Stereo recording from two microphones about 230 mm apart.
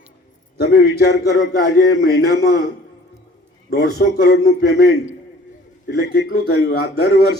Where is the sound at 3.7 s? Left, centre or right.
Left.